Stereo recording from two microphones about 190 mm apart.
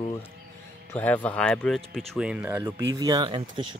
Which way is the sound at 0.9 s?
10° left (ahead or behind).